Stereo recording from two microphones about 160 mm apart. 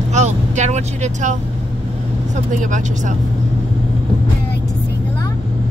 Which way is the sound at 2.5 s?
50° right (ahead or behind).